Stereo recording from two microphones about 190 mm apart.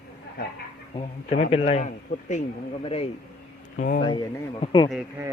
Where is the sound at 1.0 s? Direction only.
35° left (ahead or behind).